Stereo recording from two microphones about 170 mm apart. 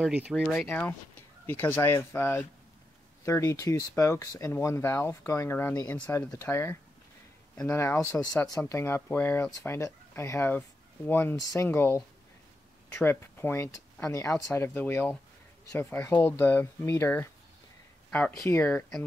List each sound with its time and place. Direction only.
0.0 s speech: 5° right (ahead or behind)
0.7 s speech: 10° left (ahead or behind)